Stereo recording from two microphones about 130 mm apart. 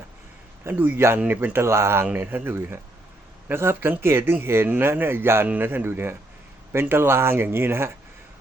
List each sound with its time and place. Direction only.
0.6 s speech: 15° right (ahead or behind)